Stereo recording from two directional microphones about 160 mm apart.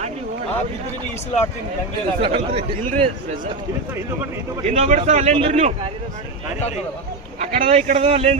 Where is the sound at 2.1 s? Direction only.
35° right (ahead or behind).